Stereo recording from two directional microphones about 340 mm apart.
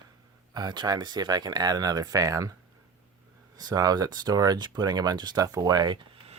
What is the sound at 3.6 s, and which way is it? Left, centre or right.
Speech, centre.